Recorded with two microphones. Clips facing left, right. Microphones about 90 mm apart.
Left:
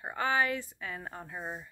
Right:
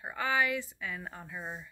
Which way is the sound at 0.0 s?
35° left (ahead or behind).